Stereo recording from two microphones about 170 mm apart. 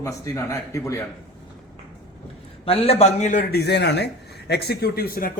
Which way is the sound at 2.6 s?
35° left (ahead or behind).